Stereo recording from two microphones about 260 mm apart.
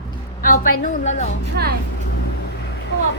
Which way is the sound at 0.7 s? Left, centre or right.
Left.